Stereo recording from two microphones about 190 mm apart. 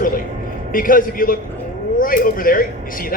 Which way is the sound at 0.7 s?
45° left (ahead or behind).